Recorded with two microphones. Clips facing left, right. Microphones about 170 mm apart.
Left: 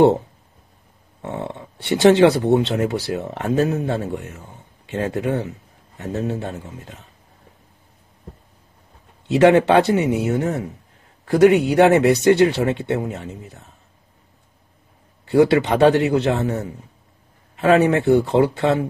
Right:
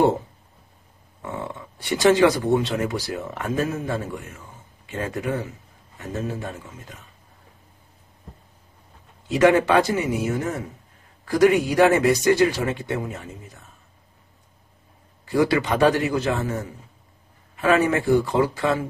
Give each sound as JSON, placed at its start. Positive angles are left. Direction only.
{"t": 1.2, "sound": "speech", "side_deg": 65}
{"t": 6.4, "sound": "speech", "side_deg": 35}
{"t": 9.3, "sound": "speech", "side_deg": 65}
{"t": 15.2, "sound": "speech", "side_deg": 65}
{"t": 17.6, "sound": "speech", "side_deg": 65}